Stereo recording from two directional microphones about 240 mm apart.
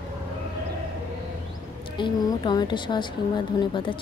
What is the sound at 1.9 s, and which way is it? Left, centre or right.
A woman's voice, centre.